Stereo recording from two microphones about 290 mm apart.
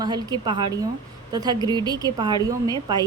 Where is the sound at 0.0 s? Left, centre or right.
Centre.